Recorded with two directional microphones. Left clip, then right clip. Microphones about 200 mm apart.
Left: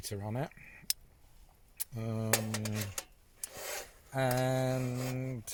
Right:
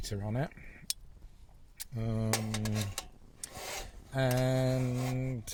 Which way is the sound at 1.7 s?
20° left (ahead or behind).